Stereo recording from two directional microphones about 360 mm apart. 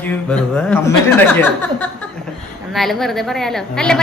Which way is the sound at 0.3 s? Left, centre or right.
Centre.